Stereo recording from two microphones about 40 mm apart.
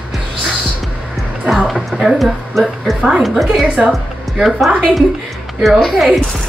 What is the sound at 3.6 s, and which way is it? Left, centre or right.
Speech, right.